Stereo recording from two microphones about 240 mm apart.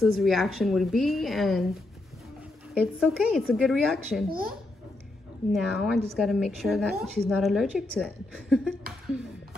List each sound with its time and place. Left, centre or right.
0.0 s a woman's voice: centre
2.7 s a woman's voice: centre
4.3 s a child's voice: right
5.5 s a woman's voice: centre